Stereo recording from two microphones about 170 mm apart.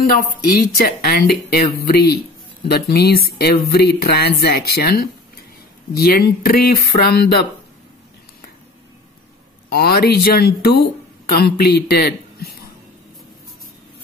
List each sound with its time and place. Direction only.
0.7 s speech: 65° left (ahead or behind)
9.7 s speech: 65° left (ahead or behind)